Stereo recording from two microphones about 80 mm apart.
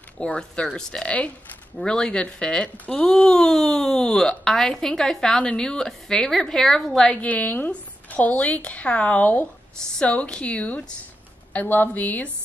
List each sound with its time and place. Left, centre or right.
0.2 s speech: centre
7.2 s a woman's voice: centre